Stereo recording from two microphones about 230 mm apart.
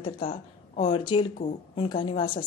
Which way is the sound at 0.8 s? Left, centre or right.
Centre.